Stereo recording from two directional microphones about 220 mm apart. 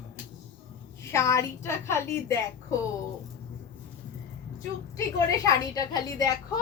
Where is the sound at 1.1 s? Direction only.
15° left (ahead or behind).